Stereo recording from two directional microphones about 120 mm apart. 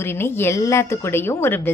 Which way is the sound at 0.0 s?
20° left (ahead or behind).